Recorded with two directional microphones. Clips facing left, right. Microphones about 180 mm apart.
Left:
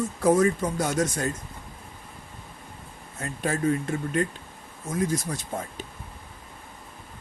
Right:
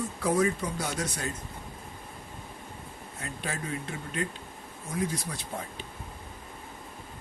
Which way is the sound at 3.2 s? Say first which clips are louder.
Left 11 dB; 45° left (ahead or behind).